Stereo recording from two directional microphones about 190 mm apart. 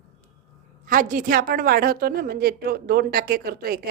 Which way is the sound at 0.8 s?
45° right (ahead or behind).